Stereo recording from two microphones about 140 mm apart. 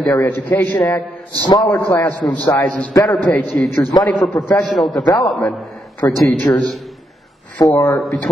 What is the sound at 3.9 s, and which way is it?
Speech, 30° left (ahead or behind).